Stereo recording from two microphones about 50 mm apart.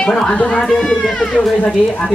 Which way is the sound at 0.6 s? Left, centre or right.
Centre.